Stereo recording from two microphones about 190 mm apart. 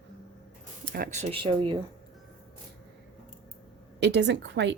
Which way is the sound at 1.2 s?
25° right (ahead or behind).